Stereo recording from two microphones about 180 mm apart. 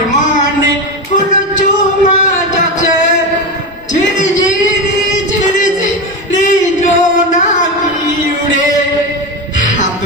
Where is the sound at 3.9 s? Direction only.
45° left (ahead or behind).